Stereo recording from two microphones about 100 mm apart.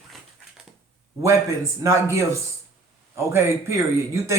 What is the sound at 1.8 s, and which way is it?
Speech, 30° right (ahead or behind).